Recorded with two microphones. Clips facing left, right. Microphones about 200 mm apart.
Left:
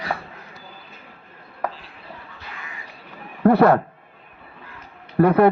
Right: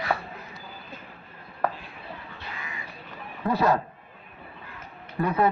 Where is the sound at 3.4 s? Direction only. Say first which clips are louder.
Left 9 dB; 60° left (ahead or behind).